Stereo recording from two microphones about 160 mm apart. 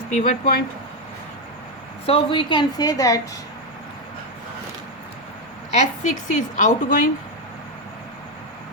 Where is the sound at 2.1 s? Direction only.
30° left (ahead or behind).